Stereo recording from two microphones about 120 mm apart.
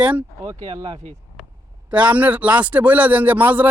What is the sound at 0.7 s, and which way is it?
Speech, 35° right (ahead or behind).